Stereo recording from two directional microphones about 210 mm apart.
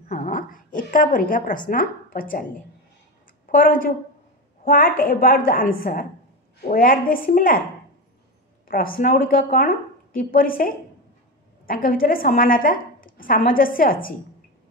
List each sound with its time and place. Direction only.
0.1 s a woman's voice: 40° left (ahead or behind)
3.4 s a woman's voice: 40° left (ahead or behind)
8.6 s a woman's voice: 45° left (ahead or behind)